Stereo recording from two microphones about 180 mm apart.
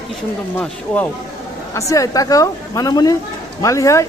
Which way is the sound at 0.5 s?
10° left (ahead or behind).